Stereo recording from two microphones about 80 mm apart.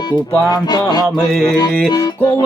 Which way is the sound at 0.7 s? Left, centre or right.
Left.